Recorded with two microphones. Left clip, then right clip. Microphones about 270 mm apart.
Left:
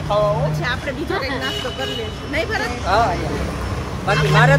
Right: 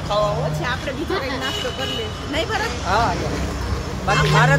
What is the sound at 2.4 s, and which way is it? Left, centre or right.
Speech, centre.